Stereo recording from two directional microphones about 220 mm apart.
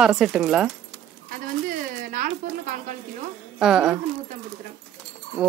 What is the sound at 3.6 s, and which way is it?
Speech, centre (ahead or behind).